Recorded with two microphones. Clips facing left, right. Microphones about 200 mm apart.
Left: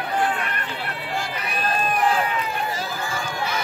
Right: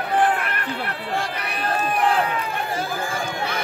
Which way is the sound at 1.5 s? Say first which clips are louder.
Left 1 dB; 65° right (ahead or behind).